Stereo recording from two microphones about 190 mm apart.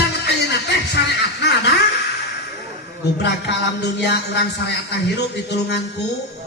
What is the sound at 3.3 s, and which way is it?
A man's voice, 60° left (ahead or behind).